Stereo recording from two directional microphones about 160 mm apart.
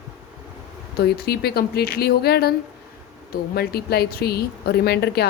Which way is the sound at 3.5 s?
80° left.